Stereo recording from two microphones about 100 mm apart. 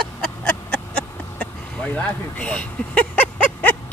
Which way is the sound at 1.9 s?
15° left (ahead or behind).